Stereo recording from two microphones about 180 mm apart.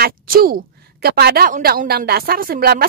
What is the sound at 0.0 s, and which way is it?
A woman's voice, 55° right (ahead or behind).